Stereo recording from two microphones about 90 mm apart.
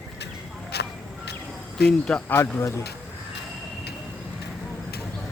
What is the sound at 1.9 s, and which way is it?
Speech, 10° left (ahead or behind).